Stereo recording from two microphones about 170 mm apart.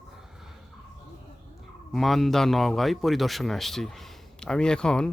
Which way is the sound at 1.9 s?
Centre (ahead or behind).